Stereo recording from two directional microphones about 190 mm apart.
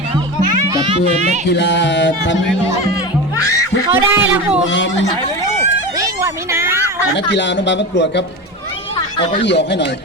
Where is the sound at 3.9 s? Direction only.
10° right (ahead or behind).